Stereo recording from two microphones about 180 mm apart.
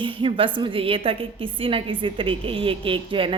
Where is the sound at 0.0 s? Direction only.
30° right (ahead or behind).